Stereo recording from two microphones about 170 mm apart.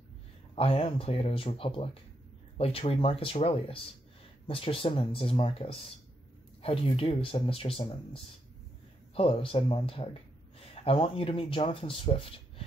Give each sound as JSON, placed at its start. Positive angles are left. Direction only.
{"t": 0.6, "sound": "speech", "side_deg": 35}